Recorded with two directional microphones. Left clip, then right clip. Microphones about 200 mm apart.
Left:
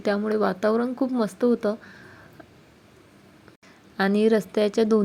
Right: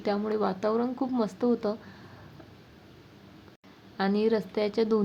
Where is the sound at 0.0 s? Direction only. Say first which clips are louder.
Left 5 dB; 20° left (ahead or behind).